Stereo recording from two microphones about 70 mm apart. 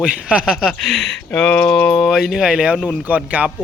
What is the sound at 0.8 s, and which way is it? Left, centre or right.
Speech, centre.